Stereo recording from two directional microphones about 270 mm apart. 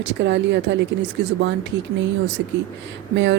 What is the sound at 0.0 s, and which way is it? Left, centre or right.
Speech, right.